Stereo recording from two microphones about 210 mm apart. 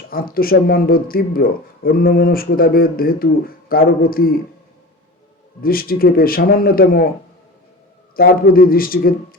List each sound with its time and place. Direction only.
0.1 s speech: 45° left (ahead or behind)
5.6 s speech: 45° left (ahead or behind)
8.2 s speech: 45° left (ahead or behind)